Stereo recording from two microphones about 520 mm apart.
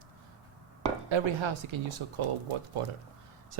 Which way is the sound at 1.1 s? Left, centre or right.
Right.